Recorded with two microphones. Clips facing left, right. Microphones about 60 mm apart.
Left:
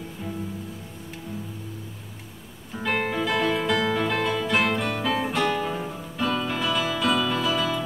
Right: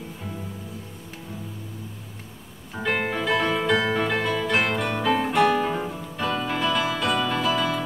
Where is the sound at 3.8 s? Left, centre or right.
Right.